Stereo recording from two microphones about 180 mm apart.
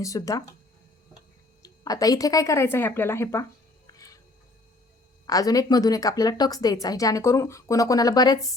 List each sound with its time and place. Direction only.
0.0 s speech: 20° left (ahead or behind)
1.6 s a woman's voice: 20° left (ahead or behind)
3.9 s a sound: 20° left (ahead or behind)
5.2 s speech: 20° left (ahead or behind)